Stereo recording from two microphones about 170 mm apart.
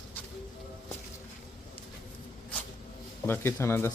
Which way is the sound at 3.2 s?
15° left (ahead or behind).